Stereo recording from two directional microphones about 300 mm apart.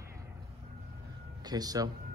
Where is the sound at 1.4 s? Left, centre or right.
Centre.